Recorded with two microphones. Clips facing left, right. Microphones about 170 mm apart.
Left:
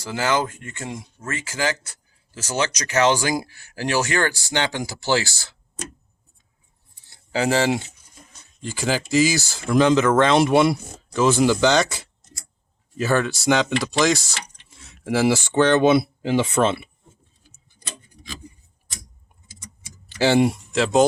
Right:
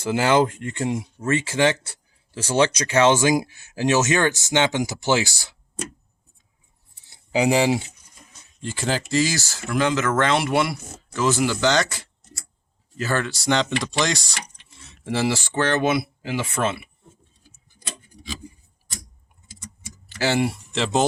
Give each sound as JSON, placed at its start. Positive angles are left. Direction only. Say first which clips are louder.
{"t": 0.1, "sound": "speech", "louder": "right 4 dB", "side_deg": -25}
{"t": 7.1, "sound": "a sound", "louder": "right 2 dB", "side_deg": -15}
{"t": 8.6, "sound": "speech", "louder": "left 1 dB", "side_deg": 0}
{"t": 20.1, "sound": "speech", "louder": "left 5 dB", "side_deg": 20}
{"t": 20.7, "sound": "speech", "louder": "left 4 dB", "side_deg": 0}